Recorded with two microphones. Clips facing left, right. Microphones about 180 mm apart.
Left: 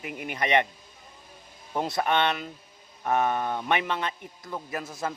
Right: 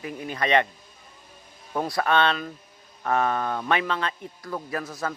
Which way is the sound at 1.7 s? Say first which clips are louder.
Right 2 dB; 20° left (ahead or behind).